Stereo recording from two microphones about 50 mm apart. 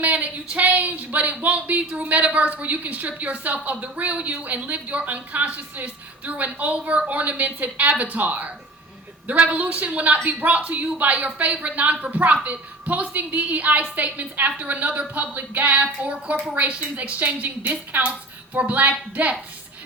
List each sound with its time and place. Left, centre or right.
0.0 s speech: right